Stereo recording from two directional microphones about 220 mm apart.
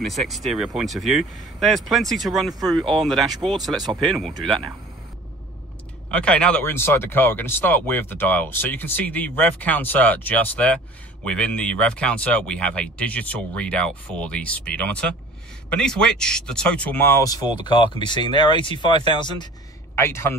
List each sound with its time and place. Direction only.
0.0 s speech: centre (ahead or behind)
6.0 s speech: 5° left (ahead or behind)